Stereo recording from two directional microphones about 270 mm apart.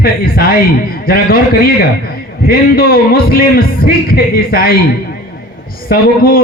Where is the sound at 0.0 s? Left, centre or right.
Left.